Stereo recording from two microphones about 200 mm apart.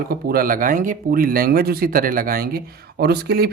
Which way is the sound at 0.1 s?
50° right (ahead or behind).